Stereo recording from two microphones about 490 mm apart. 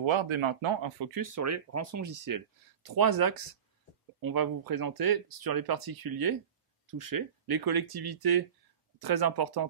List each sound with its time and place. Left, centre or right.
0.0 s speech: right